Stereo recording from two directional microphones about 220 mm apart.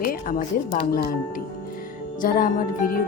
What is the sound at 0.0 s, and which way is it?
Speech, 40° left (ahead or behind).